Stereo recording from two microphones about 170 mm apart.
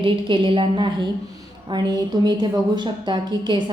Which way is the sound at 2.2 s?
25° right (ahead or behind).